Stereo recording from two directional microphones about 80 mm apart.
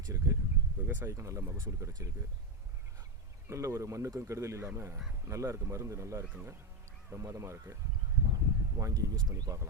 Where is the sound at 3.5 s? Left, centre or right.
Right.